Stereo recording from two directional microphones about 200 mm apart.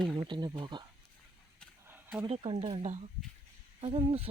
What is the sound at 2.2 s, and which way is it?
Speech, 30° right (ahead or behind).